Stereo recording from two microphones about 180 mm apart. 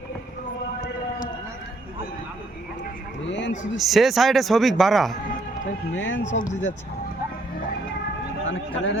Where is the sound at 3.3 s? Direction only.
90° left.